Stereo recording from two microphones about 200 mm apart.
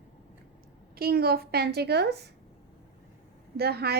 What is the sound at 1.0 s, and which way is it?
A woman's voice, 50° right (ahead or behind).